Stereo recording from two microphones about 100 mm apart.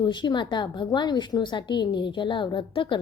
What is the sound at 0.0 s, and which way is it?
A woman's voice, 50° left (ahead or behind).